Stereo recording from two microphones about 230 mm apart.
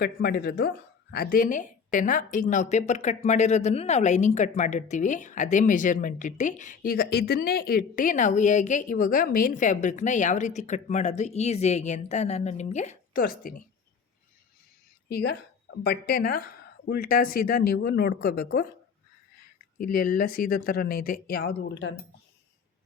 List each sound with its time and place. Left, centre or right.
0.0 s a woman's voice: left
15.1 s a woman's voice: left
19.8 s a woman's voice: left